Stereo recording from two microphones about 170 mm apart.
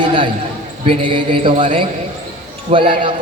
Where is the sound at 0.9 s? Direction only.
30° right (ahead or behind).